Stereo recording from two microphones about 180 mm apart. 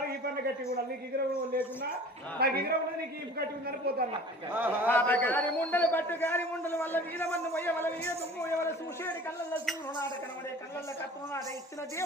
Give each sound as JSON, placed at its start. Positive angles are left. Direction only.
{"t": 2.4, "sound": "a man's voice", "side_deg": -60}
{"t": 4.5, "sound": "a man's voice", "side_deg": -10}
{"t": 4.9, "sound": "a man's voice", "side_deg": 10}